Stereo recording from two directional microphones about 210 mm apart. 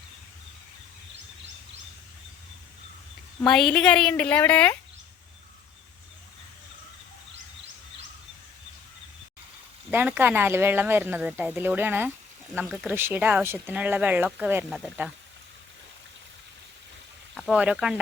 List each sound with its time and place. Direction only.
3.4 s a woman's voice: centre (ahead or behind)
9.9 s speech: 10° right (ahead or behind)
17.3 s speech: centre (ahead or behind)